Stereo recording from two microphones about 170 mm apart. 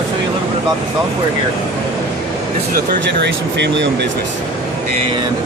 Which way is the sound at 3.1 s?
90° right.